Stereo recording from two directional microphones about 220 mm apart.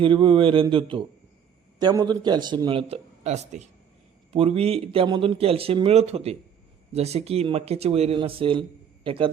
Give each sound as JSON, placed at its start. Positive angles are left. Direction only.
{"t": 0.0, "sound": "speech", "side_deg": -25}